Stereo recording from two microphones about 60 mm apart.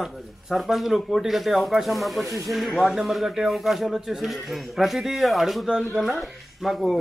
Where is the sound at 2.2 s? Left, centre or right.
Right.